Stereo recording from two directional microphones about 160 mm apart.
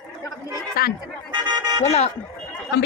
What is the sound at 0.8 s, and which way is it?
Speech, 70° left (ahead or behind).